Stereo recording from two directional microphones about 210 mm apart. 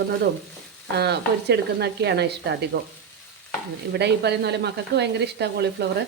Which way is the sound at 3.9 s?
50° right (ahead or behind).